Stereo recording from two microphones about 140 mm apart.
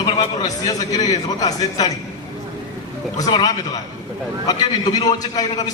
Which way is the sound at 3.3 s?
30° left (ahead or behind).